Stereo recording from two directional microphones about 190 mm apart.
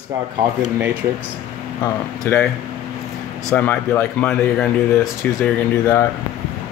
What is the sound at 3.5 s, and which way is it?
Speech, 10° left (ahead or behind).